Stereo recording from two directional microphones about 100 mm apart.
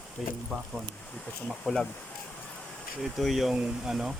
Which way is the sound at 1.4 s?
5° left (ahead or behind).